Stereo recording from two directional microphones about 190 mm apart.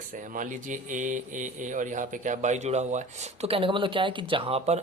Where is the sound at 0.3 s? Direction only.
45° right (ahead or behind).